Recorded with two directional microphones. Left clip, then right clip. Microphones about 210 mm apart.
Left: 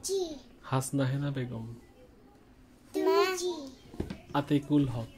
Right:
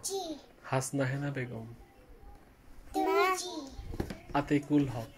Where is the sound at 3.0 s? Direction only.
40° left (ahead or behind).